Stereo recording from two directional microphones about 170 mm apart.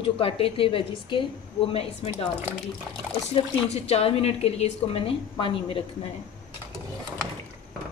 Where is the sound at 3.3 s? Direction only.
35° left (ahead or behind).